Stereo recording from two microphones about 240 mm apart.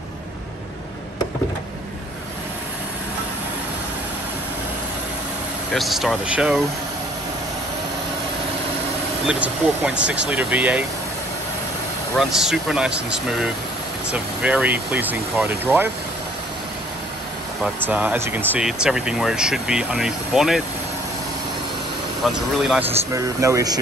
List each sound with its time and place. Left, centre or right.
5.7 s speech: centre
9.3 s speech: centre
12.2 s speech: centre
17.8 s speech: centre
22.2 s speech: centre